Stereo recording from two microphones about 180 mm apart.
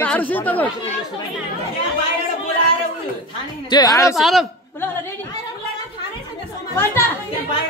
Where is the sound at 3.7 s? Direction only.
20° left (ahead or behind).